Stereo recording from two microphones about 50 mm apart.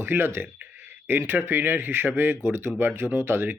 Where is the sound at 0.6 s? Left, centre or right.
Right.